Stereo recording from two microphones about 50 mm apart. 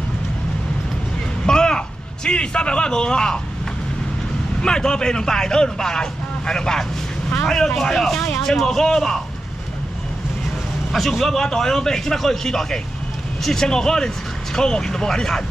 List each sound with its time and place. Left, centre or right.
1.4 s a sound: centre
4.6 s a man's voice: centre
10.9 s a man's voice: centre